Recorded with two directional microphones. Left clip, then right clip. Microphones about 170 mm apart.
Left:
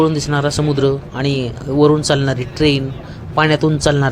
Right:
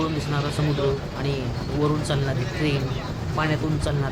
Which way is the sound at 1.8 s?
45° left (ahead or behind).